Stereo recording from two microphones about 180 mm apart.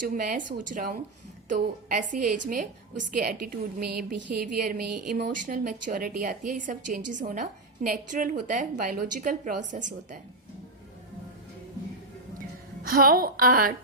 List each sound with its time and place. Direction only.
0.1 s a woman's voice: 45° right (ahead or behind)
12.4 s a woman's voice: 55° right (ahead or behind)